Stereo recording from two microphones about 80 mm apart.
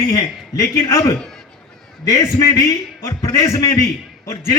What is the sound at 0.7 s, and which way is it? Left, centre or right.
Speech, left.